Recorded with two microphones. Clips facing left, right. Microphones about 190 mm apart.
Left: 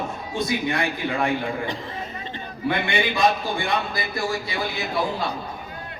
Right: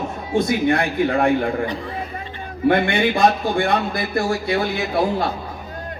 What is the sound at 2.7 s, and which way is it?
A man's voice, 55° right (ahead or behind).